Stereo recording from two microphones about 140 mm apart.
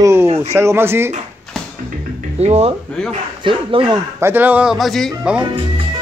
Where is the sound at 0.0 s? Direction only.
15° right (ahead or behind).